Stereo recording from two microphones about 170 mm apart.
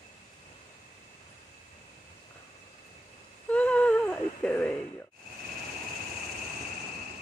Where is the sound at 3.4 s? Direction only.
5° left (ahead or behind).